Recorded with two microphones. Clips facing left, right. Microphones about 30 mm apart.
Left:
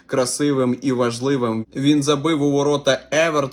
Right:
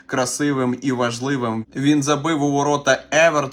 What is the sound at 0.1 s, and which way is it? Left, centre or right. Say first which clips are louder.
Speech: left 1 dB; left.